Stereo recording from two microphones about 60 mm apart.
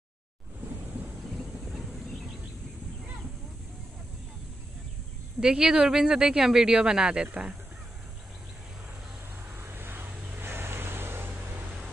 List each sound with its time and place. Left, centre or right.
1.3 s a sound: centre
5.4 s speech: centre
9.6 s vehicle: right